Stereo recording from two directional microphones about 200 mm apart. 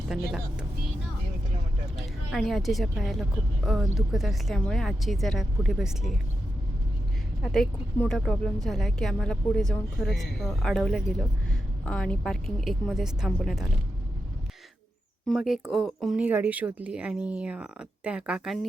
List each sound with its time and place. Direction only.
2.0 s speech: centre (ahead or behind)
7.4 s speech: centre (ahead or behind)
15.3 s speech: centre (ahead or behind)